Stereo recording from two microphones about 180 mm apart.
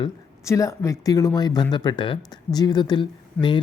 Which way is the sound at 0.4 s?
15° left (ahead or behind).